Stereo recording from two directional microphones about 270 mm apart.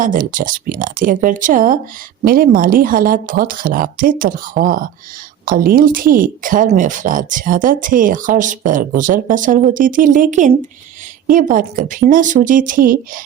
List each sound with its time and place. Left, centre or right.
0.0 s speech: right